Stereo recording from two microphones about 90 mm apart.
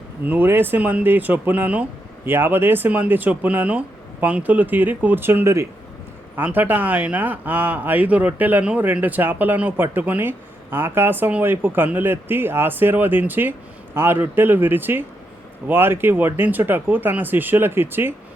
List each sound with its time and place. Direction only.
0.3 s speech: 25° right (ahead or behind)